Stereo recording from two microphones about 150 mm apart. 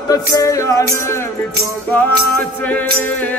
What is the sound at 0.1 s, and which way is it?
Music, 20° left (ahead or behind).